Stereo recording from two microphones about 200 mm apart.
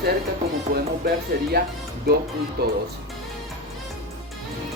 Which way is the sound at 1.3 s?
55° right (ahead or behind).